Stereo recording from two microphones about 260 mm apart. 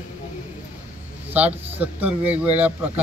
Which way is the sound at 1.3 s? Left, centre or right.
Centre.